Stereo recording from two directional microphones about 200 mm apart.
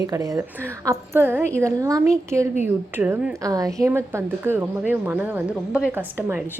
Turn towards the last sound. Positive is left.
turn(degrees=-10)  # may be behind; listen again after turning